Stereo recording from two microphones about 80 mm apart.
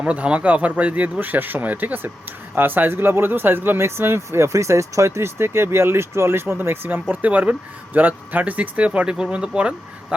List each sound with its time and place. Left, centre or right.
0.0 s speech: centre